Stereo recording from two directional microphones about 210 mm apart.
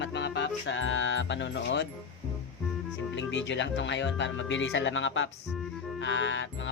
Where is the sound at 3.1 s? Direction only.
60° left (ahead or behind).